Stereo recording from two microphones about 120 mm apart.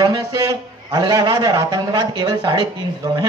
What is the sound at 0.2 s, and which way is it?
A man's voice, 30° right (ahead or behind).